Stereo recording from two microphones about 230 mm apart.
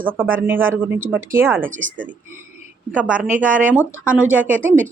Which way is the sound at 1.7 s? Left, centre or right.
Right.